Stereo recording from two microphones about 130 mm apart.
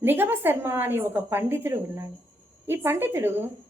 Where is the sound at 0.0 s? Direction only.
15° right (ahead or behind).